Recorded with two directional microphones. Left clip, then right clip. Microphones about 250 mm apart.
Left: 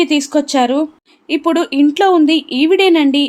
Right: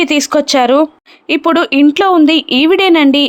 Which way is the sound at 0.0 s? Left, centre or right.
Centre.